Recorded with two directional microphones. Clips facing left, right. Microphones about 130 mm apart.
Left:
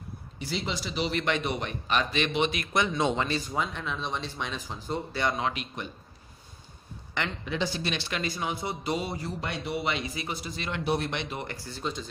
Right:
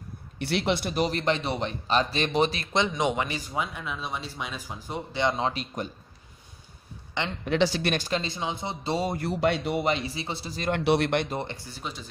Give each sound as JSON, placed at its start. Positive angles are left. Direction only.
{"t": 0.4, "sound": "speech", "side_deg": -65}
{"t": 5.5, "sound": "speech", "side_deg": -35}
{"t": 7.4, "sound": "speech", "side_deg": -80}
{"t": 8.1, "sound": "speech", "side_deg": -25}
{"t": 9.0, "sound": "speech", "side_deg": -50}
{"t": 9.3, "sound": "speech", "side_deg": -70}
{"t": 9.8, "sound": "speech", "side_deg": -30}
{"t": 10.7, "sound": "speech", "side_deg": -80}
{"t": 11.1, "sound": "speech", "side_deg": -40}
{"t": 11.4, "sound": "speech", "side_deg": -15}